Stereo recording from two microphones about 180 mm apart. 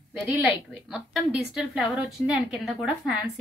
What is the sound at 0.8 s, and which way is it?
A woman's voice, centre (ahead or behind).